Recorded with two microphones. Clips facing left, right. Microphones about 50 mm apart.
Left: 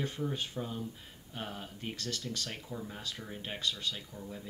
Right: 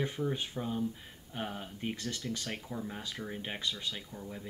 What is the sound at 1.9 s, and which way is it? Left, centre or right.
Speech, centre.